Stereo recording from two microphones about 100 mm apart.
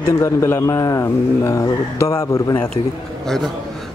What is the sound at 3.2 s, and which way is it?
Speech, 5° left (ahead or behind).